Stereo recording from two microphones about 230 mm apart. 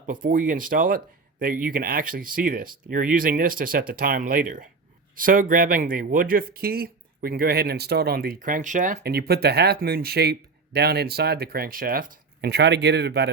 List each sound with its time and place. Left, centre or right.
0.1 s speech: right